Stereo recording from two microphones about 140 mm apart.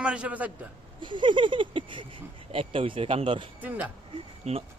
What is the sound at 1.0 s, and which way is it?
Speech, 35° right (ahead or behind).